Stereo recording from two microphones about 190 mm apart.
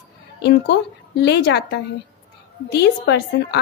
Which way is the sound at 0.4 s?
60° left (ahead or behind).